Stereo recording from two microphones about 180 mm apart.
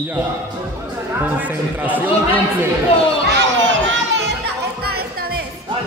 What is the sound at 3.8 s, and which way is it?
Music, 90° right.